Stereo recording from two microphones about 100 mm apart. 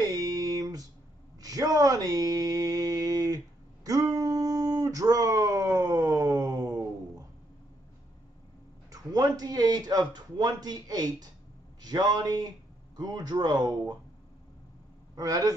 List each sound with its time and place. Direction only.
0.0 s a sound: 40° right (ahead or behind)
8.9 s speech: 40° right (ahead or behind)
15.1 s a man's voice: 40° right (ahead or behind)